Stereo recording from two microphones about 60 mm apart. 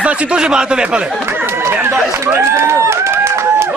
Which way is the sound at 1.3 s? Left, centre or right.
Right.